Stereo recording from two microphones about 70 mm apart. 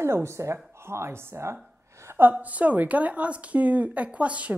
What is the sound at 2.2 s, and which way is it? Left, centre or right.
Speech, right.